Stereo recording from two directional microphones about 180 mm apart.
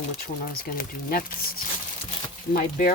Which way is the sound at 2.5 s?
50° left (ahead or behind).